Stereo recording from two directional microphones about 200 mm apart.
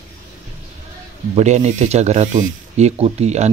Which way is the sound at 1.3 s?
35° right (ahead or behind).